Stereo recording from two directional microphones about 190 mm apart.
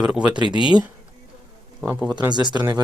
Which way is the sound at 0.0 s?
5° right (ahead or behind).